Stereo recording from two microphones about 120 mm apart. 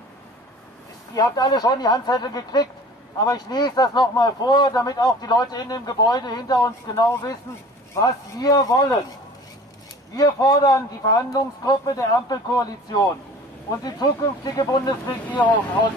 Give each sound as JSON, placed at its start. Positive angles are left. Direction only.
{"t": 1.1, "sound": "speech", "side_deg": 35}
{"t": 10.1, "sound": "speech", "side_deg": 30}
{"t": 15.3, "sound": "speech", "side_deg": 15}